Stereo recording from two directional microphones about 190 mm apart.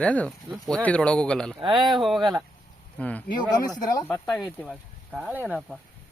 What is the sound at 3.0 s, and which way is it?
Speech, 5° left (ahead or behind).